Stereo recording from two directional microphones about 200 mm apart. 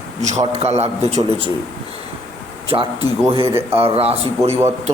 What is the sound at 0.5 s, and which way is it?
Speech, 30° right (ahead or behind).